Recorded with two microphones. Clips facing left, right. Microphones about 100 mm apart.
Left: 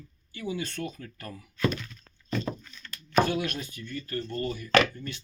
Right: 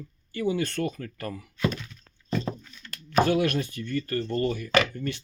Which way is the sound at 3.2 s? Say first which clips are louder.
Right 6 dB; 65° right (ahead or behind).